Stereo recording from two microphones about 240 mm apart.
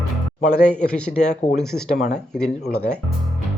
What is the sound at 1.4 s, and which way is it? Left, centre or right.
Speech, left.